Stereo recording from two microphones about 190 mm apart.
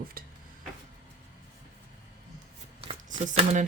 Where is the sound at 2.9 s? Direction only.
40° right (ahead or behind).